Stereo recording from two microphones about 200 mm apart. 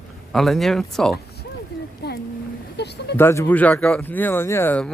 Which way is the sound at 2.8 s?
55° left (ahead or behind).